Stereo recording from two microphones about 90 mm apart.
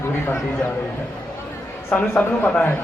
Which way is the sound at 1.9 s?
5° left (ahead or behind).